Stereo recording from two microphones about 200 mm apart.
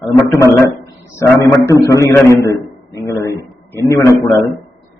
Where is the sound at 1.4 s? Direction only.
15° left (ahead or behind).